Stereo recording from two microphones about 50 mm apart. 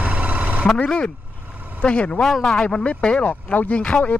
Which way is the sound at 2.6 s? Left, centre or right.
Centre.